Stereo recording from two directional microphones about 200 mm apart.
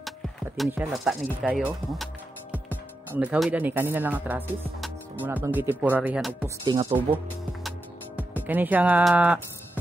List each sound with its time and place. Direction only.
0.6 s speech: 5° right (ahead or behind)
3.1 s speech: 10° right (ahead or behind)
6.6 s speech: 25° right (ahead or behind)
8.2 s speech: 10° right (ahead or behind)